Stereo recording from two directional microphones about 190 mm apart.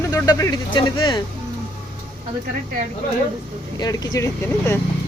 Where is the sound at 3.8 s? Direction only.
20° left (ahead or behind).